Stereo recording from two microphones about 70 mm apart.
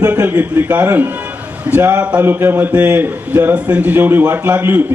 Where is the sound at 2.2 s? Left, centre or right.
Right.